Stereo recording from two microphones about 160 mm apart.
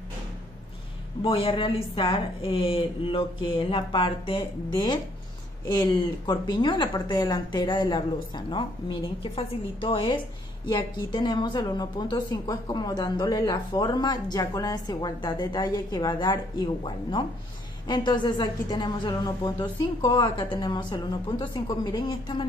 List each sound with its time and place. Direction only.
1.2 s a woman's voice: 30° left (ahead or behind)